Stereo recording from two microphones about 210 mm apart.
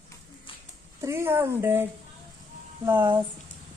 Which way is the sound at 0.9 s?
15° right (ahead or behind).